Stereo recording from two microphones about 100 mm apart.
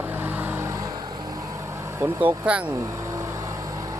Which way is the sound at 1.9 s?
15° right (ahead or behind).